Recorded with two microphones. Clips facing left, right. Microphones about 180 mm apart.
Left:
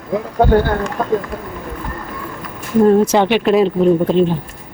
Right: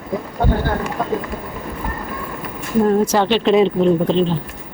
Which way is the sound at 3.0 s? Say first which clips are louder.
Left 2 dB; 20° left (ahead or behind).